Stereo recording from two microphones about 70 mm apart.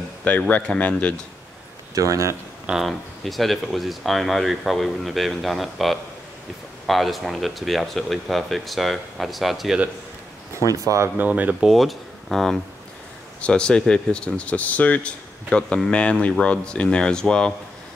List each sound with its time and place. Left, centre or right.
0.5 s speech: centre
2.0 s speech: right
2.8 s speech: centre
10.5 s speech: right
11.1 s speech: right
11.7 s speech: centre
13.4 s speech: centre